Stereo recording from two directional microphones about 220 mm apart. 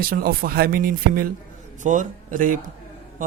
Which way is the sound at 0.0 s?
40° right (ahead or behind).